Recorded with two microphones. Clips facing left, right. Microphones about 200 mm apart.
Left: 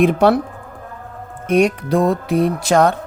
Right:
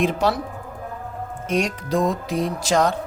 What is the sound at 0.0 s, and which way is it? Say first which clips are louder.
Speech: left 7 dB; 60° left (ahead or behind).